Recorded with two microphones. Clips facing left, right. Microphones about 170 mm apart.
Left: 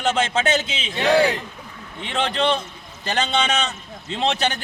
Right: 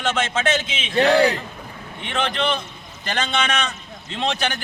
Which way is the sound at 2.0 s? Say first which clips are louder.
Left 1 dB; 30° left (ahead or behind).